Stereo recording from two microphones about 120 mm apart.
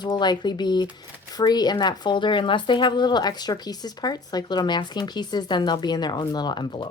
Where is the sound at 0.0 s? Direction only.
35° left (ahead or behind).